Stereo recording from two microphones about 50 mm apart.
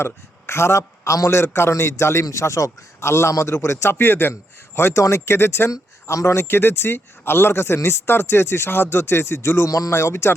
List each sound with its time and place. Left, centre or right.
0.0 s a man's voice: left
5.0 s a man's voice: left
6.1 s speech: left
6.5 s speech: left